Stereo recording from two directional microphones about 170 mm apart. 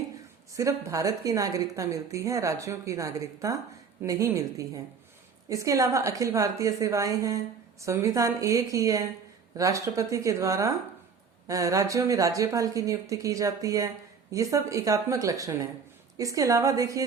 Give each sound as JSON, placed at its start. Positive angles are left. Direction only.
{"t": 0.5, "sound": "speech", "side_deg": -20}